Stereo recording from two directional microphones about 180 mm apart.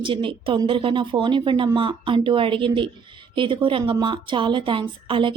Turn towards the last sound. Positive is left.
turn(degrees=-30)  # may be behind; listen again after turning